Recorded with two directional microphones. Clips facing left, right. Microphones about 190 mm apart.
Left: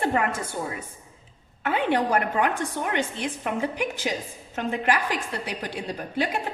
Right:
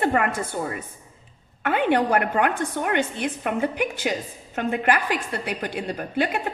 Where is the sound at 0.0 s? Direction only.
60° right (ahead or behind).